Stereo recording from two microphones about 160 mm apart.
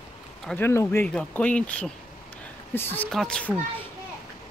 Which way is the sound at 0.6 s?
15° left (ahead or behind).